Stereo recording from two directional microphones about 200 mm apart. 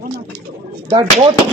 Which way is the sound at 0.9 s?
25° right (ahead or behind).